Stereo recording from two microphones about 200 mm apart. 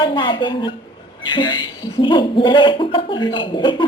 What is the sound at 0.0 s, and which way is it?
Speech, 25° left (ahead or behind).